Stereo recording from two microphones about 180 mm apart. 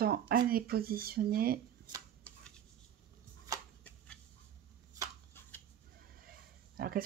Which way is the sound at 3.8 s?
5° left (ahead or behind).